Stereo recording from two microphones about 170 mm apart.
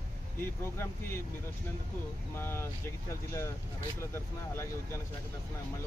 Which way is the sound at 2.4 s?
15° left (ahead or behind).